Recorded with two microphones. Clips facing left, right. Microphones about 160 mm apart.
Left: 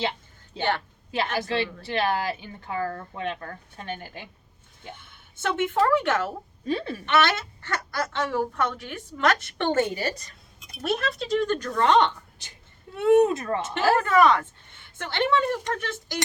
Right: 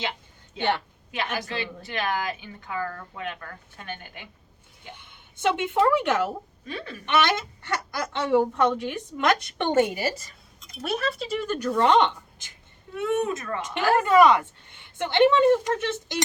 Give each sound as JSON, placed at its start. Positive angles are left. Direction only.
{"t": 1.1, "sound": "a woman's voice", "side_deg": 30}
{"t": 4.9, "sound": "speech", "side_deg": -20}
{"t": 6.7, "sound": "a woman's voice", "side_deg": 30}
{"t": 7.0, "sound": "a woman's voice", "side_deg": -15}
{"t": 13.0, "sound": "a woman's voice", "side_deg": 30}
{"t": 14.0, "sound": "a woman's voice", "side_deg": -15}